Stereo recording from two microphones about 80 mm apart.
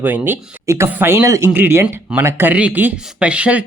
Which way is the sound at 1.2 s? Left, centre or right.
Right.